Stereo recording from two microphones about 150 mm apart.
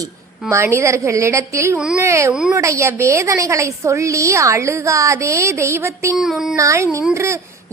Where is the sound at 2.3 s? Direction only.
5° right (ahead or behind).